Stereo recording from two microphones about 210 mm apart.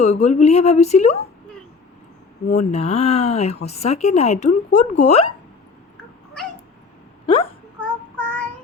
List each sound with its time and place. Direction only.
0.0 s speech: 30° left (ahead or behind)
2.5 s speech: 30° left (ahead or behind)
8.2 s child singing: 5° left (ahead or behind)